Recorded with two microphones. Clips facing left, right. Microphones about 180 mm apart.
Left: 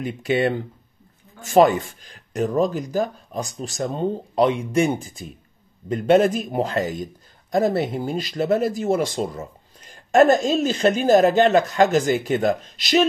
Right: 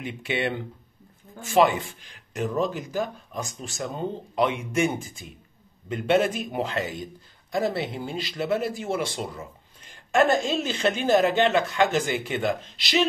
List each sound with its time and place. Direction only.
0.0 s speech: 40° left (ahead or behind)